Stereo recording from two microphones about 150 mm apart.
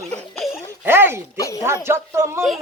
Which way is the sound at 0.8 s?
15° right (ahead or behind).